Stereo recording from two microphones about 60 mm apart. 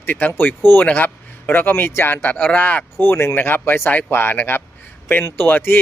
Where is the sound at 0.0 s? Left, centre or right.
Left.